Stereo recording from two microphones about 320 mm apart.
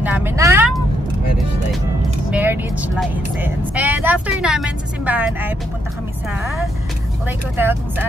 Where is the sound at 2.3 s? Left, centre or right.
Centre.